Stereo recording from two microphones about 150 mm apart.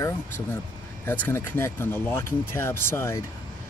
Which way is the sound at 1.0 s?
15° left (ahead or behind).